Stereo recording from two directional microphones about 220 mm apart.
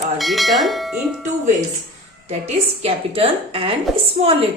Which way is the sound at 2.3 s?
30° right (ahead or behind).